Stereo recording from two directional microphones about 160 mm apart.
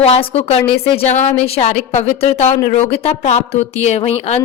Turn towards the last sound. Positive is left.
turn(degrees=40)  # may be behind; listen again after turning